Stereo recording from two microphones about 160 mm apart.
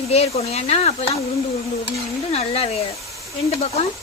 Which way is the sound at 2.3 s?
40° left (ahead or behind).